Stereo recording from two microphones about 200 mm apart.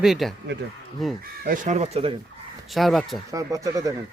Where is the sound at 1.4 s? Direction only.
35° right (ahead or behind).